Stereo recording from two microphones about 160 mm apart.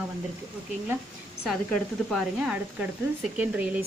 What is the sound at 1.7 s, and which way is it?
Speech, centre (ahead or behind).